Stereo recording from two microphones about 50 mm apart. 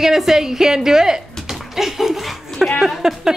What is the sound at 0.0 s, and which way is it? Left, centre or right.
Speech, centre.